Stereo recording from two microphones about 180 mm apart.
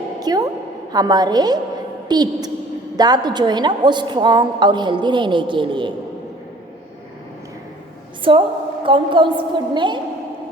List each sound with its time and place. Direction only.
0.2 s a sound: 20° right (ahead or behind)
0.9 s a woman's voice: 20° right (ahead or behind)
8.2 s a woman's voice: 30° right (ahead or behind)